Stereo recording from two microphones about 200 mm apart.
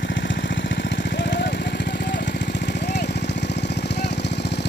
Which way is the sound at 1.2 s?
60° left (ahead or behind).